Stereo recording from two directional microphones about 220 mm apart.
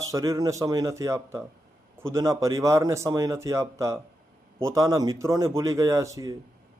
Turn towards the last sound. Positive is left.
turn(degrees=-15)  # may be behind; listen again after turning